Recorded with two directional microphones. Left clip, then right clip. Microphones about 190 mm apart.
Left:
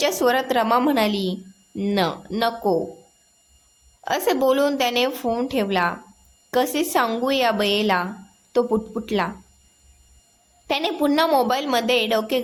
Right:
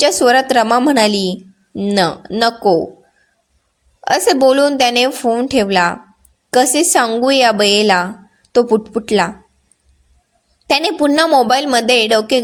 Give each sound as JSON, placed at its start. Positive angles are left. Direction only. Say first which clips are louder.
{"t": 0.0, "sound": "a woman's voice", "louder": "right 9 dB", "side_deg": -35}
{"t": 1.7, "sound": "speech", "louder": "right 6 dB", "side_deg": -25}
{"t": 2.4, "sound": "a woman's voice", "louder": "right 9 dB", "side_deg": -35}
{"t": 4.0, "sound": "a woman's voice", "louder": "right 9 dB", "side_deg": -35}
{"t": 10.7, "sound": "a woman's voice", "louder": "right 8 dB", "side_deg": -35}